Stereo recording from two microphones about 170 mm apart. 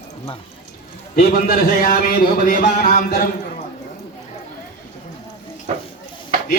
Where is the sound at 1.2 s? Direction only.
55° left (ahead or behind).